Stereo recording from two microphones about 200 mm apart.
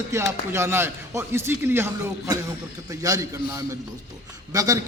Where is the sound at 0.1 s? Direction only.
15° right (ahead or behind).